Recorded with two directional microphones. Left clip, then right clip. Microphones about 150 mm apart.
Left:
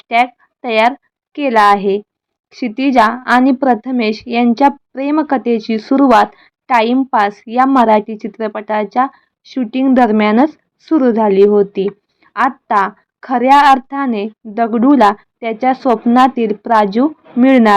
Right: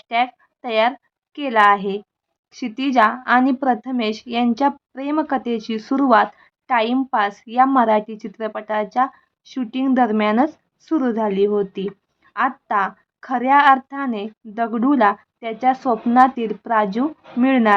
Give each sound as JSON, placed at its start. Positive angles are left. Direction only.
{"t": 0.1, "sound": "a woman's voice", "side_deg": 30}